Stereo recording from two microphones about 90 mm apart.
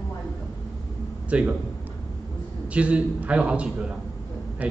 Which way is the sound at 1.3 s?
15° right (ahead or behind).